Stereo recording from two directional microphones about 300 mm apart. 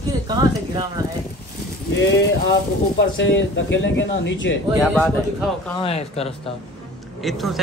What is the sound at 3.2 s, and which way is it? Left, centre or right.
Speech, left.